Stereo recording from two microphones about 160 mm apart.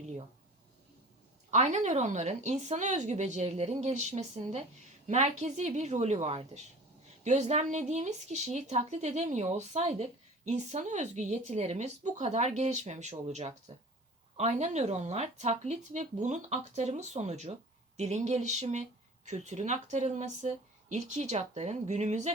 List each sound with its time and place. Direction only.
1.5 s speech: 45° right (ahead or behind)